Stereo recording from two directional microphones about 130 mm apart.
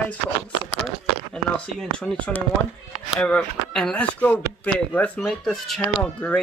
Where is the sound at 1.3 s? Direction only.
5° left (ahead or behind).